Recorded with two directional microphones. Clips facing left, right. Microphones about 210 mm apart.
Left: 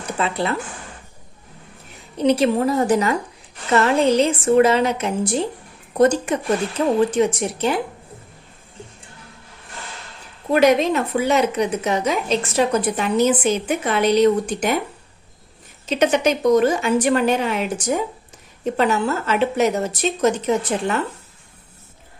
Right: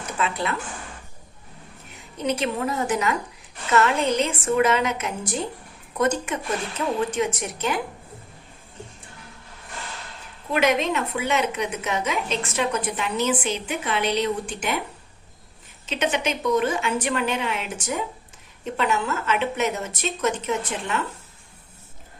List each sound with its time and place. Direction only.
0.2 s a woman's voice: 30° left (ahead or behind)
2.1 s a woman's voice: 35° left (ahead or behind)
10.5 s a woman's voice: 35° left (ahead or behind)
15.9 s a woman's voice: 40° left (ahead or behind)